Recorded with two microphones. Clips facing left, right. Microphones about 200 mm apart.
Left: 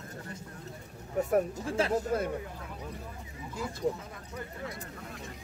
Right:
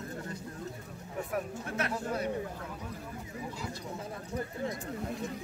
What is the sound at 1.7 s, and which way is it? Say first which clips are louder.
Speech: left 6 dB; 30° left (ahead or behind).